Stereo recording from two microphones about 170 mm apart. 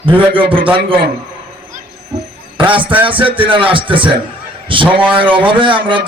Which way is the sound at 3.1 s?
30° right (ahead or behind).